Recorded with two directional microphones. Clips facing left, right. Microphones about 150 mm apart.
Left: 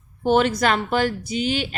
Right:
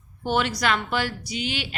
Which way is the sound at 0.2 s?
40° left (ahead or behind).